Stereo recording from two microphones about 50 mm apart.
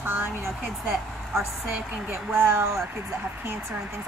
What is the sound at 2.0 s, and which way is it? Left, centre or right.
Speech, right.